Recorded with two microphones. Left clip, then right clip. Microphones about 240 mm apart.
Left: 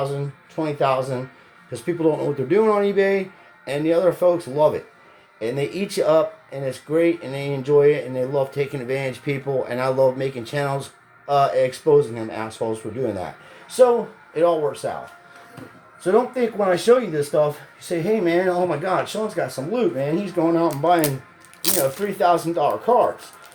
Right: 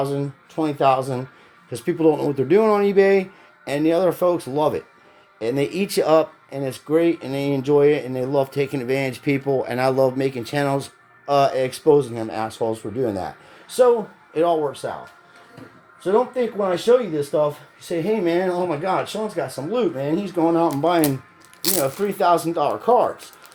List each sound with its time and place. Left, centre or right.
0.0 s speech: right
14.3 s speech: right
16.0 s speech: centre
22.0 s speech: right